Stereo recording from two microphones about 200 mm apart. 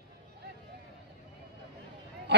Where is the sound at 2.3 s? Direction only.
55° right (ahead or behind).